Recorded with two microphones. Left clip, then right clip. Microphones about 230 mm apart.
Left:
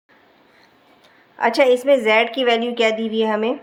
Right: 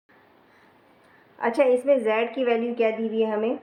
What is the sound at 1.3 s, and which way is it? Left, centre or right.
A woman's voice, left.